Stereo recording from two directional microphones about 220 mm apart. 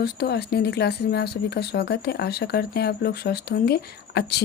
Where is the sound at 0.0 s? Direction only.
45° left (ahead or behind).